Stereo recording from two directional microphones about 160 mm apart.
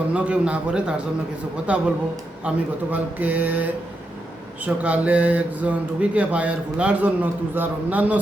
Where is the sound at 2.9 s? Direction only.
10° right (ahead or behind).